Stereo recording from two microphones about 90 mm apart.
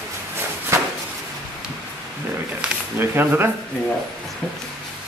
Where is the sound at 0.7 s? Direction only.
30° right (ahead or behind).